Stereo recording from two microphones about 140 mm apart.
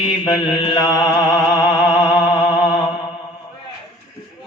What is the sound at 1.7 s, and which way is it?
Music, 30° left (ahead or behind).